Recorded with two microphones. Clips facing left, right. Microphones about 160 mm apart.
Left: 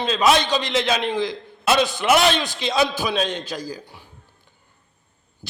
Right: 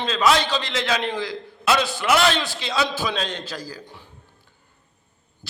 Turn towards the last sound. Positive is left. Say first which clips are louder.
# left 4 dB
turn(degrees=15)  # may be behind; listen again after turning